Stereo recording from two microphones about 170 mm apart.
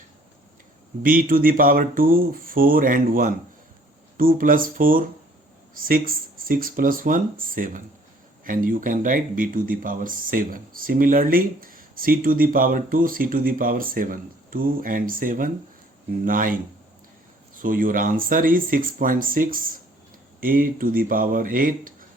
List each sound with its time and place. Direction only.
1.0 s speech: 55° right (ahead or behind)